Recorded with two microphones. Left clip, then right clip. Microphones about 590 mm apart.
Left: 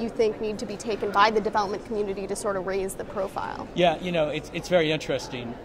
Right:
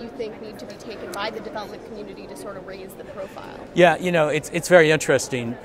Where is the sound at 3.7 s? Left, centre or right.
Right.